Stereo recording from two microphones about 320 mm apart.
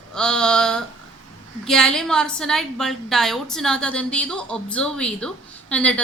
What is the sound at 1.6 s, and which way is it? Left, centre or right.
A woman's voice, centre.